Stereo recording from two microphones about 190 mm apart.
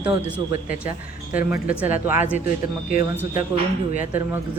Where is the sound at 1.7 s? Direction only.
5° right (ahead or behind).